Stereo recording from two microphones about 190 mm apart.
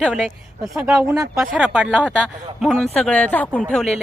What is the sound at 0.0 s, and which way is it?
Speech, centre (ahead or behind).